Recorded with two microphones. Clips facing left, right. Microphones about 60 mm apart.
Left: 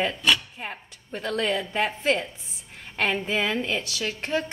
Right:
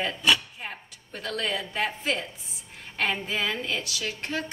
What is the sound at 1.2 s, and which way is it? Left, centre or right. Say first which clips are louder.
Speech: left 4 dB; left.